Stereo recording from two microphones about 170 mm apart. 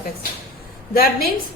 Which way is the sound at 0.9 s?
60° left (ahead or behind).